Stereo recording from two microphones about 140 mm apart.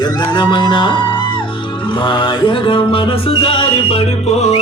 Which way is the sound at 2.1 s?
35° left (ahead or behind).